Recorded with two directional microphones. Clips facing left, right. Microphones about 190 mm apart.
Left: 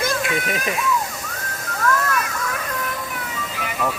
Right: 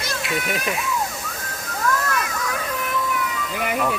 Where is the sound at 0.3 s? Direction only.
Centre (ahead or behind).